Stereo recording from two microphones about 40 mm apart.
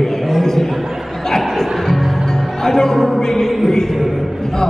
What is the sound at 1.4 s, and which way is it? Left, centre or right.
Music, centre.